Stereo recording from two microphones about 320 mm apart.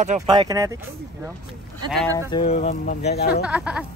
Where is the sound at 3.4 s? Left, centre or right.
Centre.